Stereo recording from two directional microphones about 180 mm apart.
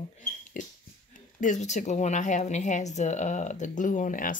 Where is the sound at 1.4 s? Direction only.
40° left (ahead or behind).